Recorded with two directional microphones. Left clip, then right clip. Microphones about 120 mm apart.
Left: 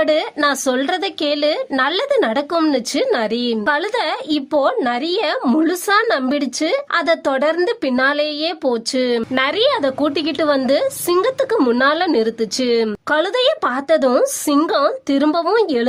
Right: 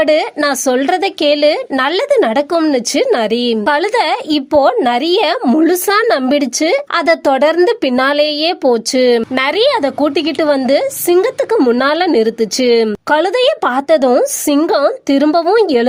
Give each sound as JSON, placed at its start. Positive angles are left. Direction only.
{"t": 0.0, "sound": "speech", "side_deg": -25}